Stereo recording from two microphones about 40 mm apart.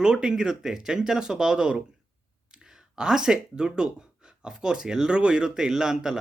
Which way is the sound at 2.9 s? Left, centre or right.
Centre.